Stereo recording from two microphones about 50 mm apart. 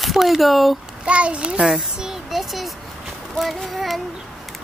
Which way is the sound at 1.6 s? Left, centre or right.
Centre.